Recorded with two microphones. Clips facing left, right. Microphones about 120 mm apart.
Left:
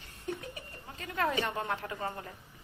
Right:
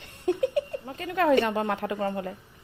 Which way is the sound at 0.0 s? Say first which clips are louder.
Right 13 dB; 75° right (ahead or behind).